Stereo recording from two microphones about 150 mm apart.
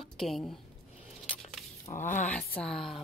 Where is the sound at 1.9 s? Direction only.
45° left (ahead or behind).